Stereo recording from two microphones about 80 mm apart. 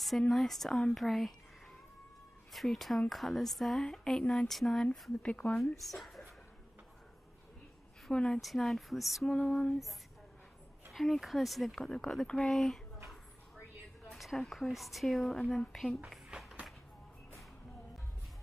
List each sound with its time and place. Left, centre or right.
0.3 s a woman's voice: centre
2.5 s a woman's voice: centre
5.2 s a sound: centre
5.8 s speech: centre
8.1 s a sound: centre
8.4 s a woman's voice: centre
9.2 s a sound: centre
10.9 s a woman's voice: centre
14.1 s a woman's voice: centre
16.3 s run: centre